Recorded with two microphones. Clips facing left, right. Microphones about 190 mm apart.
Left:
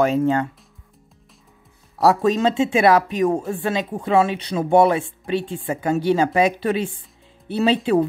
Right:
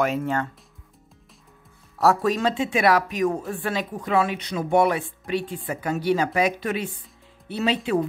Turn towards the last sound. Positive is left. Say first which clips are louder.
# left 5 dB
turn(degrees=30)  # may be behind; listen again after turning